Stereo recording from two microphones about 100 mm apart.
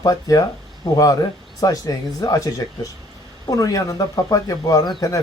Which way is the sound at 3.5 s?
35° left (ahead or behind).